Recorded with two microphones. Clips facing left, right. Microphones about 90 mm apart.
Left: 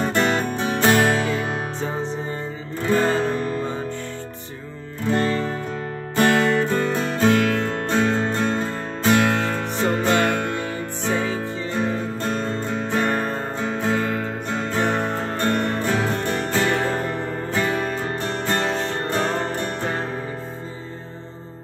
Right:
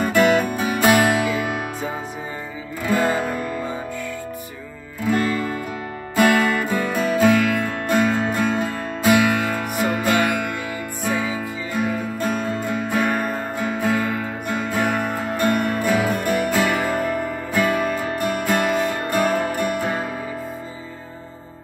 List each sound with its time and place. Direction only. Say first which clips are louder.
0.0 s music: right 4 dB; 5° right (ahead or behind)
2.9 s music: left 1 dB; 10° right (ahead or behind)
5.1 s music: even; 30° left (ahead or behind)
6.1 s music: right 1 dB; 5° right (ahead or behind)
11.8 s guitar: right 2 dB; 10° right (ahead or behind)
13.7 s music: right 1 dB; 10° right (ahead or behind)